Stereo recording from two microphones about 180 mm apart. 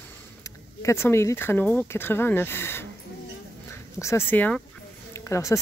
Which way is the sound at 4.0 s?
15° left (ahead or behind).